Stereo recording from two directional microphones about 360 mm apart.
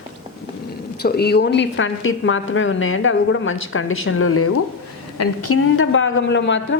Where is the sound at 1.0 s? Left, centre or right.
Left.